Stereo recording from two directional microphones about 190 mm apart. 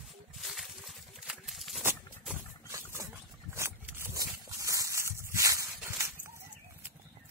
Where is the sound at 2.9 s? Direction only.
15° right (ahead or behind).